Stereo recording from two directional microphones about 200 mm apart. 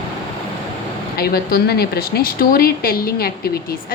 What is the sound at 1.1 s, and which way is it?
Speech, 50° left (ahead or behind).